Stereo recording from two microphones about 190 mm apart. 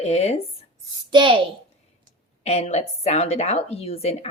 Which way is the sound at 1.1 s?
25° right (ahead or behind).